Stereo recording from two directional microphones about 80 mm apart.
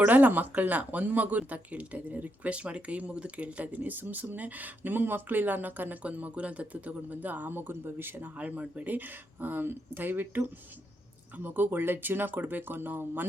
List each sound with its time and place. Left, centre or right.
0.0 s speech: right